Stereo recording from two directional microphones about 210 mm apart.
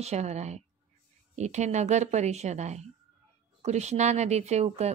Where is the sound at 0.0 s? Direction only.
30° right (ahead or behind).